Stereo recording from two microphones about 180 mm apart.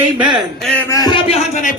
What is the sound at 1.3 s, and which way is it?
Speech, 40° left (ahead or behind).